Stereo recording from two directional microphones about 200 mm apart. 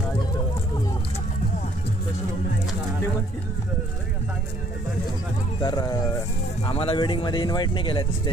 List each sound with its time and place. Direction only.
5.6 s speech: 20° left (ahead or behind)